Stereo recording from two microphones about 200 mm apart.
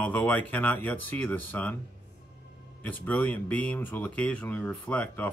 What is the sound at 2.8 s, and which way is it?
Speech, 10° left (ahead or behind).